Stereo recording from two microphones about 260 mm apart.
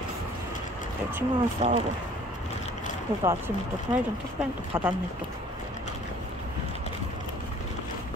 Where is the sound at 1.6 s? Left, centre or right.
Right.